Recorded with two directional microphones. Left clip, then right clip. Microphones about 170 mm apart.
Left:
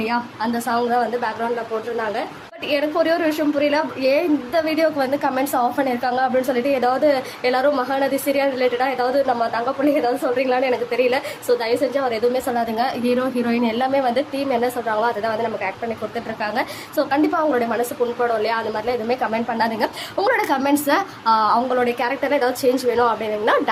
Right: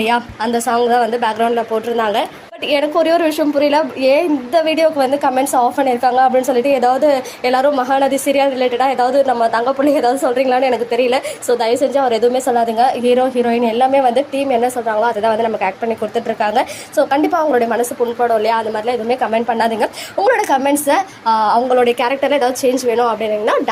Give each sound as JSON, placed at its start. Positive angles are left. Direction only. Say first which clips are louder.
{"t": 0.0, "sound": "a woman's voice", "louder": "right 6 dB", "side_deg": -30}
{"t": 0.7, "sound": "a woman's voice", "louder": "right 6 dB", "side_deg": -20}
{"t": 2.6, "sound": "a woman's voice", "louder": "right 5 dB", "side_deg": -15}